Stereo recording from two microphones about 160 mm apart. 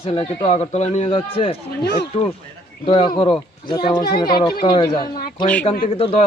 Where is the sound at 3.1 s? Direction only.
30° left (ahead or behind).